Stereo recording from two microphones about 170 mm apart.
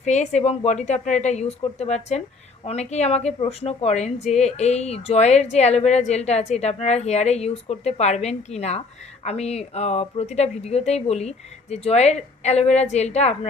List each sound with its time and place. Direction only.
0.0 s a woman's voice: 45° left (ahead or behind)